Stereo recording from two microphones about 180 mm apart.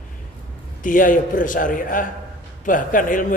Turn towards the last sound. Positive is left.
turn(degrees=50)  # may be behind; listen again after turning